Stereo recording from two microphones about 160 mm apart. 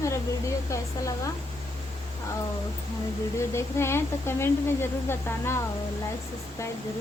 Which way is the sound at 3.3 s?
15° left (ahead or behind).